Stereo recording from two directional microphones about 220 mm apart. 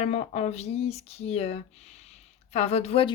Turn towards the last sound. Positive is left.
turn(degrees=25)  # may be behind; listen again after turning